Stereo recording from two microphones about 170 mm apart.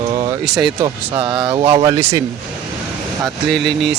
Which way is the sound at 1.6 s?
15° right (ahead or behind).